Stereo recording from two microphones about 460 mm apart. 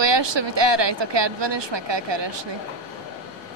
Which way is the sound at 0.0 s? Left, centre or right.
Right.